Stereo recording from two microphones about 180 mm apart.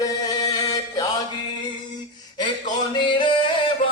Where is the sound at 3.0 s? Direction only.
25° left (ahead or behind).